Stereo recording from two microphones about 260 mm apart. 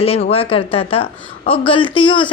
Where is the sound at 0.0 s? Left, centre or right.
Left.